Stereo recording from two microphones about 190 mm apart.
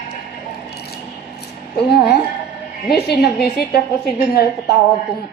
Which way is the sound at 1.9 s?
55° left (ahead or behind).